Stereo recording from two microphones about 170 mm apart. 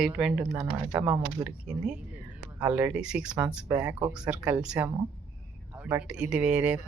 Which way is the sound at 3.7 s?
20° right (ahead or behind).